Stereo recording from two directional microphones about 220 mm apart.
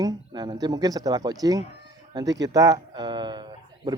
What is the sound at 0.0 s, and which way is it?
Speech, 15° right (ahead or behind).